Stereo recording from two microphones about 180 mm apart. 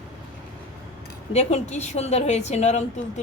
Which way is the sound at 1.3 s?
35° left (ahead or behind).